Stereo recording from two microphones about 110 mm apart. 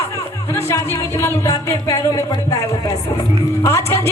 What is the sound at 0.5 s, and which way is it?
Speech, 25° left (ahead or behind).